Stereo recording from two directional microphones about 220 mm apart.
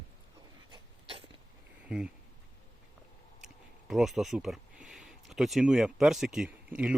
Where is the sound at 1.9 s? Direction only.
5° right (ahead or behind).